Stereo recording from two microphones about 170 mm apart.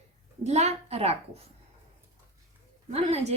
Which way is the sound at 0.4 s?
40° right (ahead or behind).